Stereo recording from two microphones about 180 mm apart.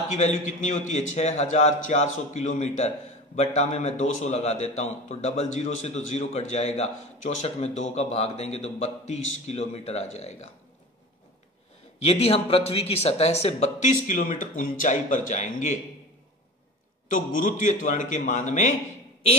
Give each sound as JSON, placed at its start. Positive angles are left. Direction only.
{"t": 0.2, "sound": "a man's voice", "side_deg": 40}
{"t": 12.0, "sound": "a man's voice", "side_deg": 35}
{"t": 17.1, "sound": "a man's voice", "side_deg": 45}